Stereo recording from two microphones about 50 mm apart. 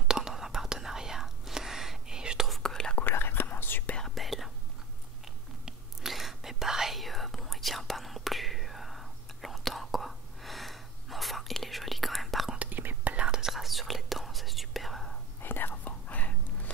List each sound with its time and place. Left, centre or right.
0.1 s whispering: centre
2.6 s whispering: centre
3.0 s whispering: left
4.0 s whispering: centre
12.5 s whispering: right
13.1 s whispering: centre
13.5 s whispering: centre
15.4 s whispering: left